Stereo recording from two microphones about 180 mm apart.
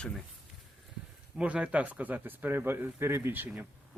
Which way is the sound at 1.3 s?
5° right (ahead or behind).